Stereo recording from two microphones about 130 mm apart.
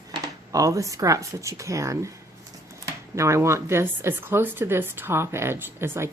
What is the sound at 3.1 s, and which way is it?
Speech, 20° right (ahead or behind).